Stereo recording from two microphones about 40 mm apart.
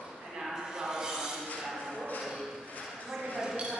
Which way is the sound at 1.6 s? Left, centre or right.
Centre.